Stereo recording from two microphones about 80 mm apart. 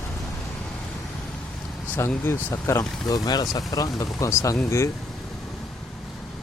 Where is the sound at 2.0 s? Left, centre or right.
Left.